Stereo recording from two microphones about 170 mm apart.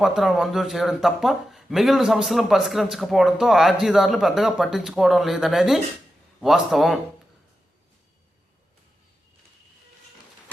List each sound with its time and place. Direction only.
0.0 s a man's voice: centre (ahead or behind)